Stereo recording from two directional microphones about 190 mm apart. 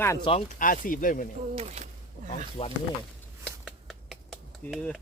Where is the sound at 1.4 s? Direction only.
35° right (ahead or behind).